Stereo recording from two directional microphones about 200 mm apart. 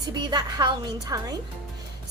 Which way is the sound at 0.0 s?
20° right (ahead or behind).